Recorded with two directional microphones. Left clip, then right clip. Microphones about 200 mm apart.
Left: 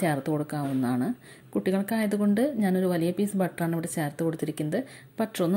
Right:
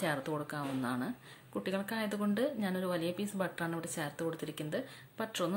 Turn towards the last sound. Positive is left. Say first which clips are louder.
# left 8 dB
turn(degrees=30)  # may be behind; listen again after turning